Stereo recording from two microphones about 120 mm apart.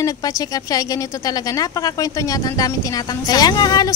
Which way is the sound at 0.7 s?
30° left (ahead or behind).